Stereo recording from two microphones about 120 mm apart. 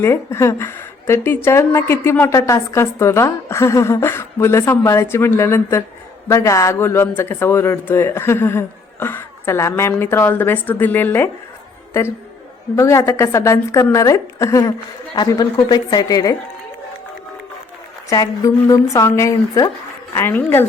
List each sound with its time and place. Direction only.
0.0 s speech: 20° left (ahead or behind)
12.7 s a woman's voice: 25° left (ahead or behind)
18.1 s a woman's voice: 30° left (ahead or behind)